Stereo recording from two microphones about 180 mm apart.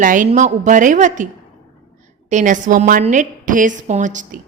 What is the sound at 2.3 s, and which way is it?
A woman's voice, 45° right (ahead or behind).